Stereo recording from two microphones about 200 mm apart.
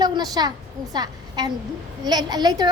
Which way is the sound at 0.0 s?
20° right (ahead or behind).